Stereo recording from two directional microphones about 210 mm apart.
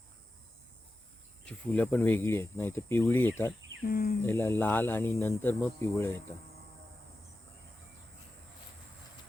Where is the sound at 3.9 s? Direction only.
45° left (ahead or behind).